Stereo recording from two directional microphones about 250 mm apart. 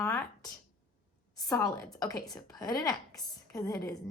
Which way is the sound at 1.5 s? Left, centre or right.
Centre.